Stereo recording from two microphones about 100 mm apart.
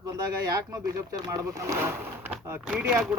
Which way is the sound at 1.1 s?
35° right (ahead or behind).